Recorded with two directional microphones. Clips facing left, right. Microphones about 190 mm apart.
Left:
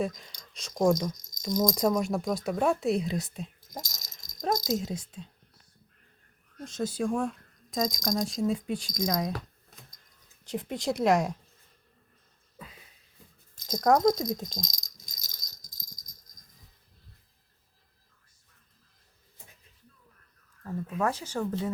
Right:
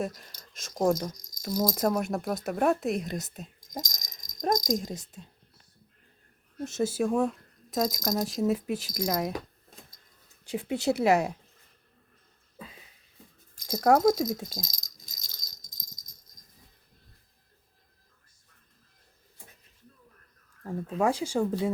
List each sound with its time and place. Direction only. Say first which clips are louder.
0.0 s speech: left 2 dB; 10° right (ahead or behind)
3.4 s rattle: right 2 dB; 15° right (ahead or behind)
4.9 s speech: left 2 dB; centre (ahead or behind)
6.7 s speech: right 3 dB; 5° right (ahead or behind)
10.4 s speech: right 3 dB; 10° right (ahead or behind)
13.6 s speech: right 1 dB; 10° right (ahead or behind)
15.7 s rattle: left 1 dB; 20° right (ahead or behind)
21.0 s speech: right 4 dB; 10° right (ahead or behind)